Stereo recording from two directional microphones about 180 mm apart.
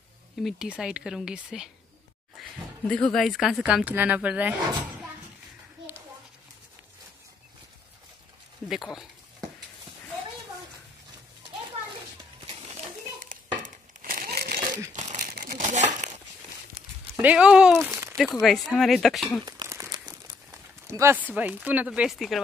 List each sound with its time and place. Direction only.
0.4 s speech: centre (ahead or behind)
2.9 s speech: 5° left (ahead or behind)
8.6 s speech: centre (ahead or behind)
12.4 s children playing: 40° right (ahead or behind)
14.0 s crumpling: 55° right (ahead or behind)
15.0 s crumpling: 40° right (ahead or behind)
17.2 s speech: 5° right (ahead or behind)
19.4 s crumpling: 20° right (ahead or behind); by 22.4 s centre (ahead or behind)